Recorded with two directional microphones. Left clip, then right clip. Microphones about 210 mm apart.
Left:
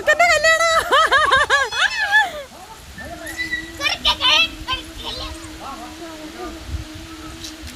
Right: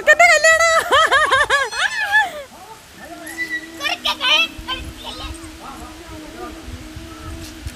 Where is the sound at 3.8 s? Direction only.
25° right (ahead or behind).